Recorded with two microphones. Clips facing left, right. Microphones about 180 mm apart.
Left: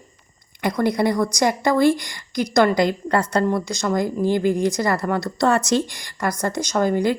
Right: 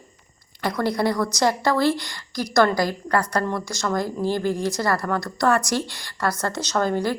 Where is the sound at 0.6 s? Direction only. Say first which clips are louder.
Left 3 dB; 20° left (ahead or behind).